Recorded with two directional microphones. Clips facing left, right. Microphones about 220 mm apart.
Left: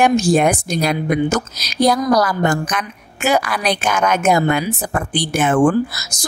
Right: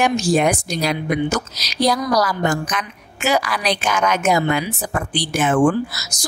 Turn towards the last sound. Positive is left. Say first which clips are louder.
# left 2 dB
turn(degrees=40)  # may be behind; listen again after turning